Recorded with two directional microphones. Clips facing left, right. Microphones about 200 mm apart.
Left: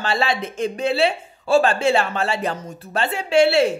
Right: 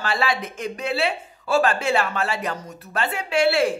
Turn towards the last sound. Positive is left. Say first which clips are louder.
# left 4 dB
turn(degrees=25)  # may be behind; listen again after turning